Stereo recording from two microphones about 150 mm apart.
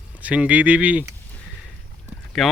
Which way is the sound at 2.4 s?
Centre (ahead or behind).